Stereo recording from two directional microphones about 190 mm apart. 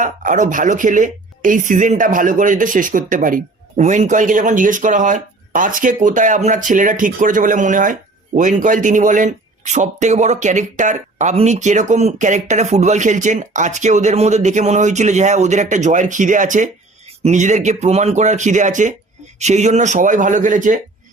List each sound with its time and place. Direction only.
0.0 s a woman's voice: 45° right (ahead or behind)